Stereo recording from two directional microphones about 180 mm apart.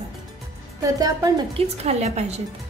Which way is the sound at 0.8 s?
20° right (ahead or behind).